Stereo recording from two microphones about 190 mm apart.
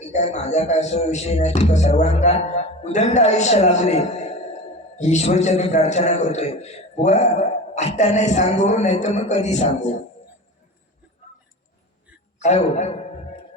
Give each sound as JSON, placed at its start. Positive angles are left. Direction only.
{"t": 0.1, "sound": "a man's voice", "side_deg": 35}
{"t": 12.4, "sound": "a man's voice", "side_deg": 35}